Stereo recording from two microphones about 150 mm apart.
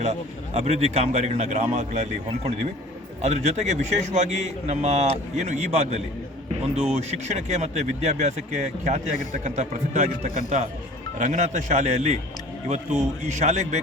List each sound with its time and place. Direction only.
0.5 s speech: 45° right (ahead or behind)